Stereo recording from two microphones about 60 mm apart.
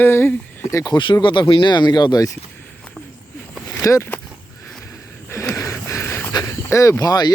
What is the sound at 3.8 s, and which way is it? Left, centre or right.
Speech, left.